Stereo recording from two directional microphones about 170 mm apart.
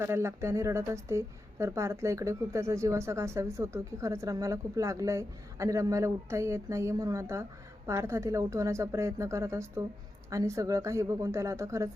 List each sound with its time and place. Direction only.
0.0 s a woman's voice: 15° right (ahead or behind)